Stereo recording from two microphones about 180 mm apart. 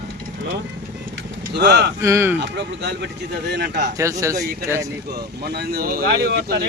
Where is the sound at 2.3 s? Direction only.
70° right (ahead or behind).